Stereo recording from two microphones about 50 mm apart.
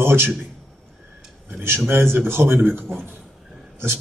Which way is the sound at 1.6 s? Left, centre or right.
Right.